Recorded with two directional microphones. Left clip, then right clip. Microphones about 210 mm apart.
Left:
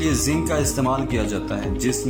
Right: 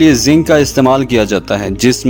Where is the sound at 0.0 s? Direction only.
40° right (ahead or behind).